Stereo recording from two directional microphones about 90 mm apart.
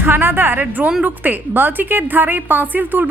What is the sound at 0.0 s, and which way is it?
A woman's voice, 25° right (ahead or behind).